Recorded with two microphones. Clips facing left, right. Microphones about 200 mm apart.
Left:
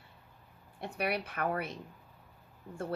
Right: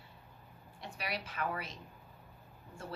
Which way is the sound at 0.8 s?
55° left (ahead or behind).